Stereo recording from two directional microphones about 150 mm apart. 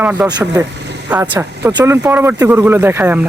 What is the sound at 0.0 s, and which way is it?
Speech, 10° right (ahead or behind).